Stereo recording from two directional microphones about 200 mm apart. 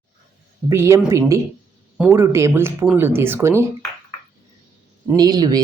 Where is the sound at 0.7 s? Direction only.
15° right (ahead or behind).